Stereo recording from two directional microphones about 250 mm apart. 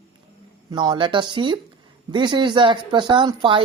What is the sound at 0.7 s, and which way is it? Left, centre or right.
Speech, centre.